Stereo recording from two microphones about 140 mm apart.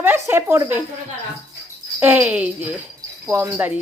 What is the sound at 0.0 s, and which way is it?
Speech, 15° right (ahead or behind).